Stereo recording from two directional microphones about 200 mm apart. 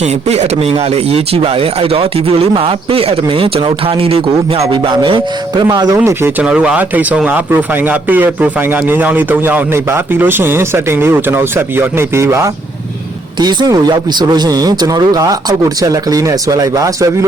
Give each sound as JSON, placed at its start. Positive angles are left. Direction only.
{"t": 0.0, "sound": "speech", "side_deg": -30}
{"t": 6.0, "sound": "speech", "side_deg": -10}